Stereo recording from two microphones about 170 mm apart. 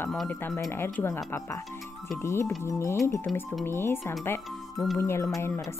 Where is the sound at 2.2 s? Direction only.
15° left (ahead or behind).